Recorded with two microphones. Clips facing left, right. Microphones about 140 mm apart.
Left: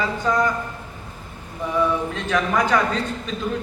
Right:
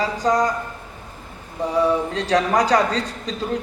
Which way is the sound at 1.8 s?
35° right (ahead or behind).